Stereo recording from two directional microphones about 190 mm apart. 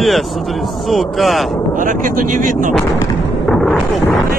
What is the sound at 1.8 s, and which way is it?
Speech, 45° right (ahead or behind).